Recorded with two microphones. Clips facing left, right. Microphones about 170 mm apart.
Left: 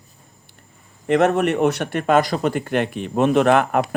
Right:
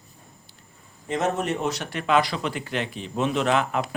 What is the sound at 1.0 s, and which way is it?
Speech, 65° left (ahead or behind).